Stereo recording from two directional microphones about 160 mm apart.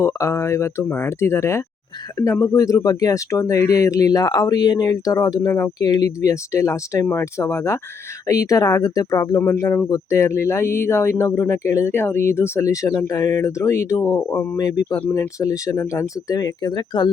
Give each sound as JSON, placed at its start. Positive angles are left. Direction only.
{"t": 0.0, "sound": "speech", "side_deg": 20}